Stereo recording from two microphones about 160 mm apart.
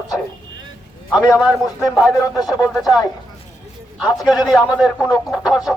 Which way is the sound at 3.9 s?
5° right (ahead or behind).